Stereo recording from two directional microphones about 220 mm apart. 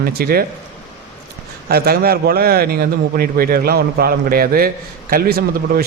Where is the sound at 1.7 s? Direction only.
45° right (ahead or behind).